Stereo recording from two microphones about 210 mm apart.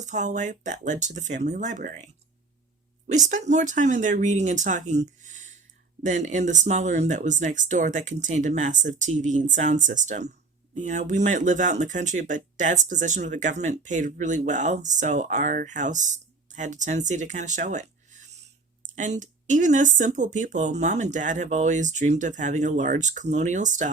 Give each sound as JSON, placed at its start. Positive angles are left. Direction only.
{"t": 0.0, "sound": "speech", "side_deg": -35}
{"t": 3.1, "sound": "speech", "side_deg": -35}